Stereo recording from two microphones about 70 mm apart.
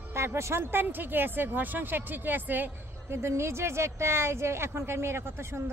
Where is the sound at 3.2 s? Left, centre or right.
Right.